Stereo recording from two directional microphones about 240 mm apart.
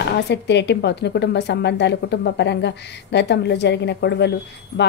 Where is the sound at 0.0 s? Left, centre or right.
Left.